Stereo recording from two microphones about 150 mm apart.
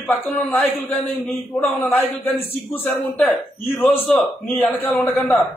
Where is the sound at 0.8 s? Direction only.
15° left (ahead or behind).